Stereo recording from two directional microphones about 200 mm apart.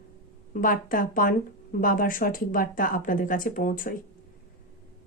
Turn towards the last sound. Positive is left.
turn(degrees=45)  # may be behind; listen again after turning